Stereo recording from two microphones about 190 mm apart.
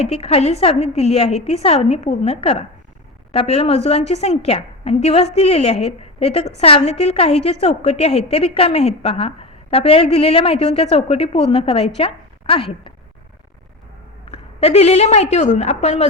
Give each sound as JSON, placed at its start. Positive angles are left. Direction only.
{"t": 0.0, "sound": "a woman's voice", "side_deg": 35}
{"t": 14.3, "sound": "a woman's voice", "side_deg": 35}